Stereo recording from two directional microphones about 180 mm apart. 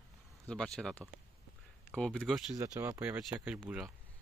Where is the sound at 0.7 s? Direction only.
5° left (ahead or behind).